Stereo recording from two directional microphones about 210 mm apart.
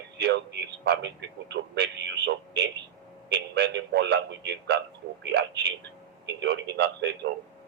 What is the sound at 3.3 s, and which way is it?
A man's voice, 55° right (ahead or behind).